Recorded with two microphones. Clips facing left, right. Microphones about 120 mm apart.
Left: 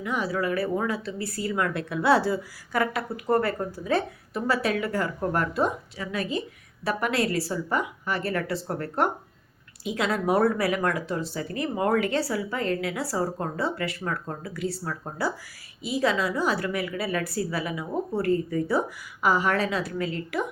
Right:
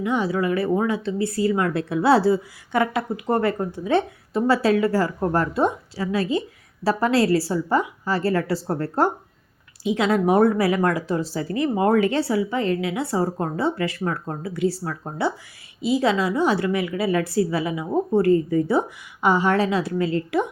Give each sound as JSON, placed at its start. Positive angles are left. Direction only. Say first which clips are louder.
{"t": 0.0, "sound": "speech", "louder": "right 5 dB", "side_deg": -30}